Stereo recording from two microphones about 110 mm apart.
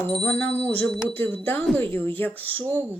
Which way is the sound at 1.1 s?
15° left (ahead or behind).